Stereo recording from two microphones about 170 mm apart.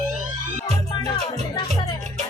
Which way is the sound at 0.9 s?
25° left (ahead or behind).